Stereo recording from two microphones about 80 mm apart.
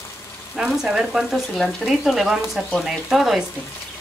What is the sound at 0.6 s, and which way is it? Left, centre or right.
Speech, centre.